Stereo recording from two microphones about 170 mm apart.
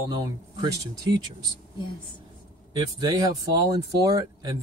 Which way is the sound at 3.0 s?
20° right (ahead or behind).